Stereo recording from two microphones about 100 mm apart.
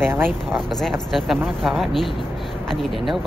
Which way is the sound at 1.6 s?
Centre (ahead or behind).